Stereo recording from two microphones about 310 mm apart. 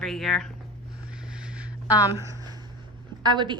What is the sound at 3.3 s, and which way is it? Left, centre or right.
Speech, centre.